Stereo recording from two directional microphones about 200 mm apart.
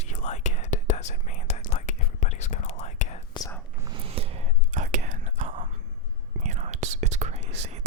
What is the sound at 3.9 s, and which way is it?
Whispering, 30° right (ahead or behind).